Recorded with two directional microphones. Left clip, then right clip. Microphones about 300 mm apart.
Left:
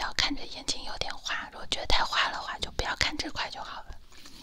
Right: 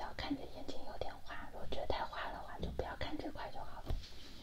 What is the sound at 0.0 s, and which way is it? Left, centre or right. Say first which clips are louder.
Whispering: left 13 dB; left.